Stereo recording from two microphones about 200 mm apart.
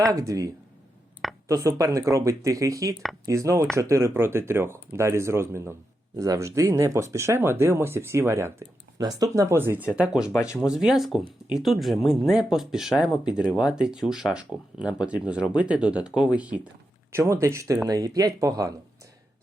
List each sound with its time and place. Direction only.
0.0 s speech: 15° right (ahead or behind)